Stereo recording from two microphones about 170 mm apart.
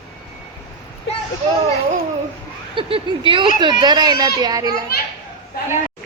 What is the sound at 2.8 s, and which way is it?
Speech, 30° right (ahead or behind).